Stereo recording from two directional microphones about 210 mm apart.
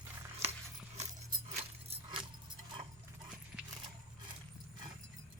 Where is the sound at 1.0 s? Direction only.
30° right (ahead or behind).